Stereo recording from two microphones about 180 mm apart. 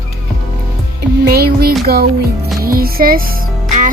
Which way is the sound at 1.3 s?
60° right (ahead or behind).